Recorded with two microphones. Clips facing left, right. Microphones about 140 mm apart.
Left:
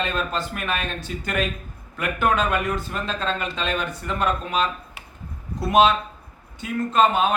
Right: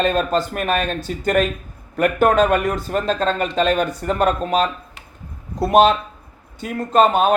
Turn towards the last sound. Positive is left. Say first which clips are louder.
# right 4 dB
turn(degrees=-40)  # may be behind; listen again after turning